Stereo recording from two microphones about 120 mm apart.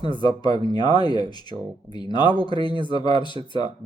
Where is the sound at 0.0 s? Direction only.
35° left (ahead or behind).